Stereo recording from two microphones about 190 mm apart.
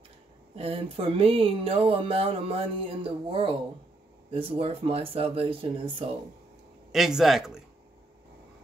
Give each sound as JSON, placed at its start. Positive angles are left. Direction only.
{"t": 0.6, "sound": "speech", "side_deg": -30}
{"t": 6.9, "sound": "speech", "side_deg": 0}